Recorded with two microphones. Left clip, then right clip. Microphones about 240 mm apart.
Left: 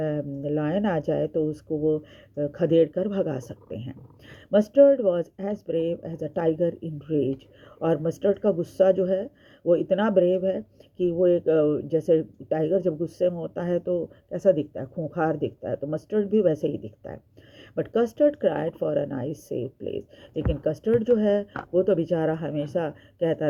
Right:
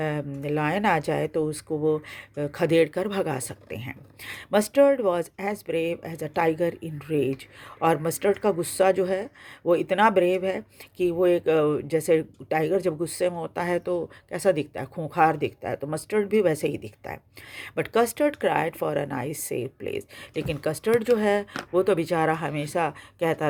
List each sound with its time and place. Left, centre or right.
0.0 s speech: right